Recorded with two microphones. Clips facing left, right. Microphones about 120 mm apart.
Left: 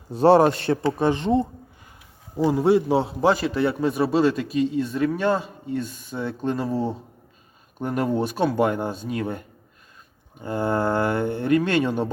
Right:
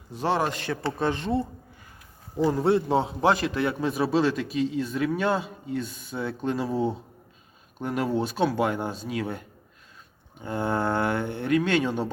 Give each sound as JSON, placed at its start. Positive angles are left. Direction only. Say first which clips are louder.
{"t": 0.1, "sound": "a man's voice", "louder": "left 10 dB", "side_deg": 35}
{"t": 0.8, "sound": "speech", "louder": "left 5 dB", "side_deg": 15}
{"t": 2.4, "sound": "a man's voice", "louder": "left 3 dB", "side_deg": 10}
{"t": 10.4, "sound": "a man's voice", "louder": "left 3 dB", "side_deg": 0}